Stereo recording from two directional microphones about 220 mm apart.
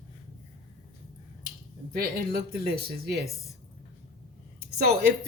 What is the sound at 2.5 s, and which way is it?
Speech, 45° right (ahead or behind).